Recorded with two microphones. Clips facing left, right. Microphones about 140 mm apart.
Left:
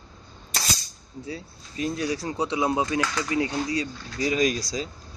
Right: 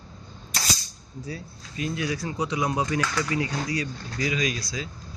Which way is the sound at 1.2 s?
30° left (ahead or behind).